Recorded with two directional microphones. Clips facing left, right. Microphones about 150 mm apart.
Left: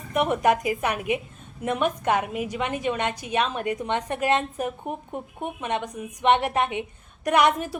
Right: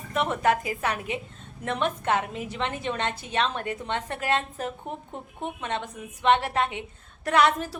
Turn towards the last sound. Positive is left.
turn(degrees=15)  # may be behind; listen again after turning